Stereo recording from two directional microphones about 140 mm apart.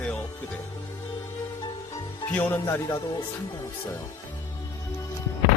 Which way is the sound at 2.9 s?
35° left (ahead or behind).